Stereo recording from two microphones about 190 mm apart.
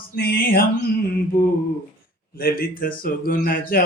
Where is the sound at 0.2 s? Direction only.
50° left (ahead or behind).